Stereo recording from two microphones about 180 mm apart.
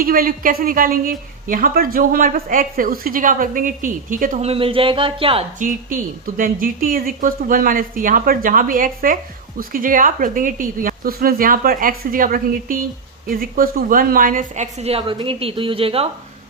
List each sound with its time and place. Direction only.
0.0 s a woman's voice: 50° right (ahead or behind)
4.4 s a woman's voice: 30° right (ahead or behind)
5.5 s a woman's voice: 50° right (ahead or behind); by 16.0 s 30° right (ahead or behind)